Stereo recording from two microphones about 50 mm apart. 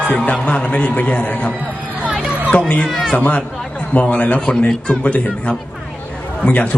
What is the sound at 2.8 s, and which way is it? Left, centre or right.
Speech, centre.